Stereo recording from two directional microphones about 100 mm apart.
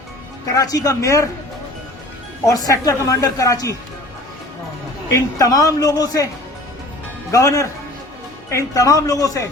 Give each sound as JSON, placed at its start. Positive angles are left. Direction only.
{"t": 0.5, "sound": "speech", "side_deg": 40}
{"t": 2.4, "sound": "speech", "side_deg": 35}
{"t": 5.1, "sound": "speech", "side_deg": 35}